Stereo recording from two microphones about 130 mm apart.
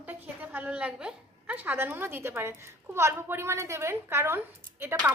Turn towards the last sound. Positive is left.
turn(degrees=-20)  # may be behind; listen again after turning